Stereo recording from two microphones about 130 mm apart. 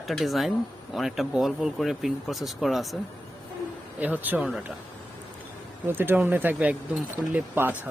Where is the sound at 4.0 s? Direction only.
15° right (ahead or behind).